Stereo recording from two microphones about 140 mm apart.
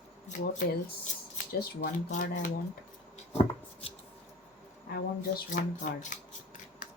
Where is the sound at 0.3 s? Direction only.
65° left (ahead or behind).